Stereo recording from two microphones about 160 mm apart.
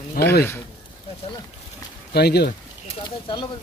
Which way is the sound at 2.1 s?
90° left.